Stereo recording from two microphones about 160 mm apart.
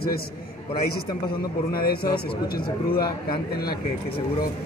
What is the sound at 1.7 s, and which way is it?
Speech, 70° left (ahead or behind).